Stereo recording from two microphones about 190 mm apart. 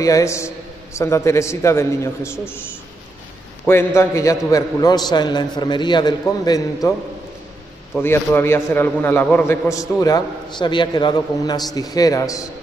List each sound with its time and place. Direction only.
0.0 s a man's voice: 15° left (ahead or behind)
3.6 s a man's voice: 15° left (ahead or behind)
7.9 s a man's voice: 10° left (ahead or behind)